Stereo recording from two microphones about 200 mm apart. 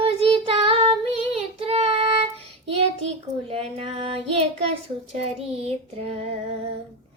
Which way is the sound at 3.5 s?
30° right (ahead or behind).